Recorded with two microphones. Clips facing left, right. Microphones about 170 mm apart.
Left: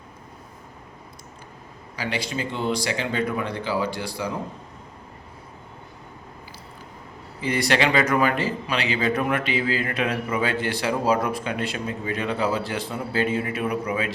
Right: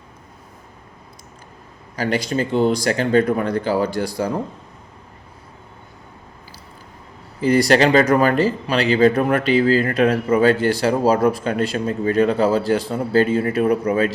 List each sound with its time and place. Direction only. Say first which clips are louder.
2.0 s speech: right 8 dB; 45° right (ahead or behind)
7.4 s speech: right 8 dB; 40° right (ahead or behind)